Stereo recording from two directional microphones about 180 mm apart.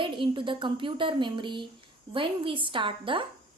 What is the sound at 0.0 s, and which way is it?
A woman's voice, 25° right (ahead or behind).